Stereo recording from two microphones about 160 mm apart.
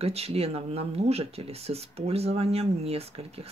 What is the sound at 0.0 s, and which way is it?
Speech, 40° right (ahead or behind).